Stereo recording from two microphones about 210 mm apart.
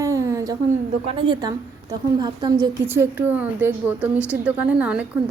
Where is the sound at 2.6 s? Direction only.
10° right (ahead or behind).